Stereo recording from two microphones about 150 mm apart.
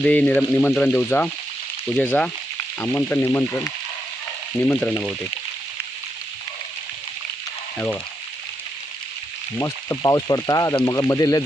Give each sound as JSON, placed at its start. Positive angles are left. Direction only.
{"t": 0.0, "sound": "speech", "side_deg": 10}
{"t": 4.7, "sound": "speech", "side_deg": 10}
{"t": 9.6, "sound": "speech", "side_deg": 20}